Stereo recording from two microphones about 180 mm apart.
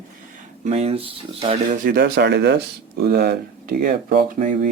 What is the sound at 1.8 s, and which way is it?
Speech, 60° right (ahead or behind).